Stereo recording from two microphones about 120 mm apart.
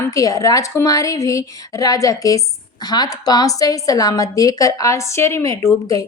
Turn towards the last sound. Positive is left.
turn(degrees=30)  # may be behind; listen again after turning